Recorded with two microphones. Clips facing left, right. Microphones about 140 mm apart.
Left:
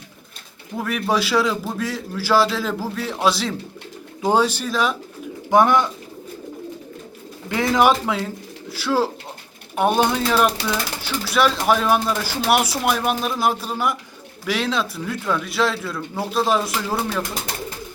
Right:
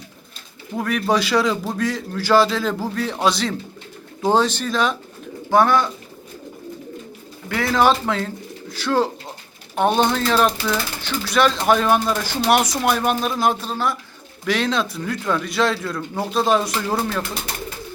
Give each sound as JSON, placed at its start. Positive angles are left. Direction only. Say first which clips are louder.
{"t": 0.8, "sound": "speech", "louder": "right 2 dB", "side_deg": 0}
{"t": 5.5, "sound": "speech", "louder": "even", "side_deg": 15}
{"t": 7.5, "sound": "speech", "louder": "left 1 dB", "side_deg": 20}